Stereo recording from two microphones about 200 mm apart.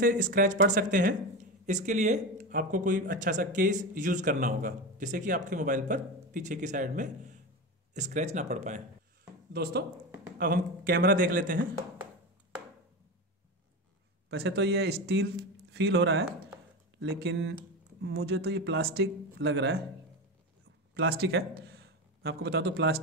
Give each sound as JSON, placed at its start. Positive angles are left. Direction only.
{"t": 0.0, "sound": "a man's voice", "side_deg": -45}
{"t": 9.5, "sound": "a man's voice", "side_deg": -50}
{"t": 14.3, "sound": "speech", "side_deg": -55}
{"t": 20.9, "sound": "a man's voice", "side_deg": -50}